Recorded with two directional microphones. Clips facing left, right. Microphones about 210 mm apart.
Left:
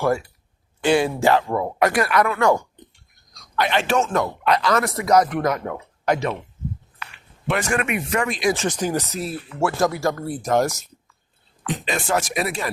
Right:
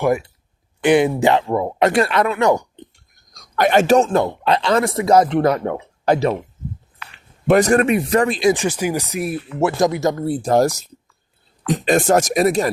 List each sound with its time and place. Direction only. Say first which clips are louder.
0.0 s speech: right 3 dB; 20° right (ahead or behind)
3.3 s speech: right 7 dB; 45° right (ahead or behind)
7.4 s speech: right 9 dB; 40° right (ahead or behind)
8.5 s speech: right 2 dB; 10° right (ahead or behind); by 12.7 s 40° right (ahead or behind)